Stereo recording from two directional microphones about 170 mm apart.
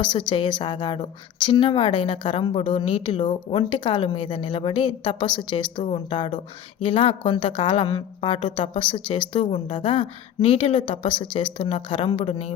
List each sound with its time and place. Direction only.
0.0 s a woman's voice: 30° left (ahead or behind)